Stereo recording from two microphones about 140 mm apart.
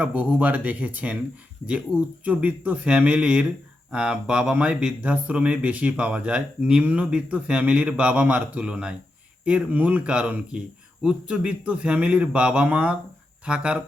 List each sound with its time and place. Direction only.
0.0 s speech: 10° right (ahead or behind)
2.2 s speech: 10° right (ahead or behind)